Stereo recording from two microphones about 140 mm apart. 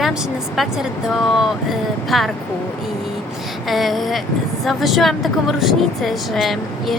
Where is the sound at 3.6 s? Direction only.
Centre (ahead or behind).